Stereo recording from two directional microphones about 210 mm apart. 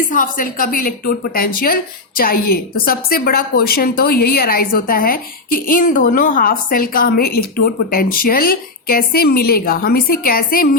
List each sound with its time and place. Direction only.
0.0 s a woman's voice: 40° left (ahead or behind)